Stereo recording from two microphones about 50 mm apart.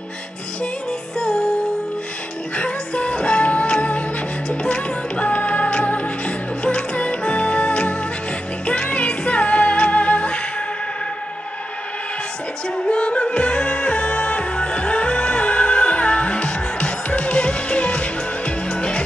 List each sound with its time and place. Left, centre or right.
2.5 s music: left
12.7 s music: left